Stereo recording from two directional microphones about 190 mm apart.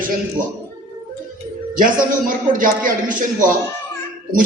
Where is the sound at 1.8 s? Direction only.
45° right (ahead or behind).